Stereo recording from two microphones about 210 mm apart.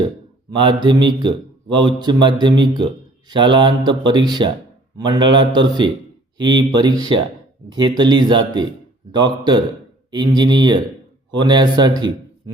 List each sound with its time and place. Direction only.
0.5 s speech: 20° right (ahead or behind)